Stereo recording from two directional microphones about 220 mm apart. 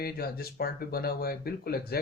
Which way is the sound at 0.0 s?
45° left (ahead or behind).